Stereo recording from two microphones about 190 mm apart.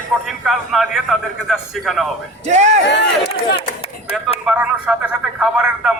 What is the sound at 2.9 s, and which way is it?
Speech, 65° left (ahead or behind).